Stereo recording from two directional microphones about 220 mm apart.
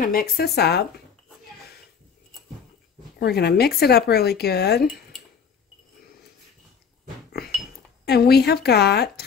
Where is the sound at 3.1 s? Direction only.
45° left (ahead or behind).